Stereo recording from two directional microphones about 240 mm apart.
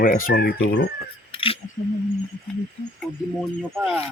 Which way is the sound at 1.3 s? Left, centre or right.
Left.